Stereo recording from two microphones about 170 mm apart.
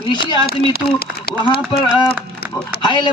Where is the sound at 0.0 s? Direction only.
25° left (ahead or behind).